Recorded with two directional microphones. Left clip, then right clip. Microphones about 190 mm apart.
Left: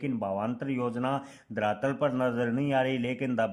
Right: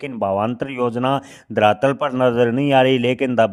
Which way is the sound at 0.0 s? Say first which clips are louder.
Right 11 dB; 45° right (ahead or behind).